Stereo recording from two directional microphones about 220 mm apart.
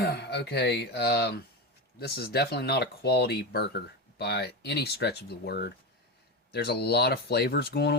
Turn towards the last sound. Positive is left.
turn(degrees=50)  # may be behind; listen again after turning